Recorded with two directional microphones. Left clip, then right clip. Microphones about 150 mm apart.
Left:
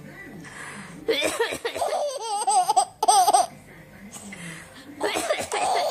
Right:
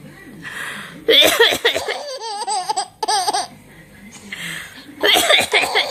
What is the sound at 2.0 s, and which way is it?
Laughter, 20° left (ahead or behind).